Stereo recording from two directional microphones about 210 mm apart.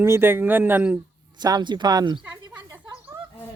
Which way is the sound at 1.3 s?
20° right (ahead or behind).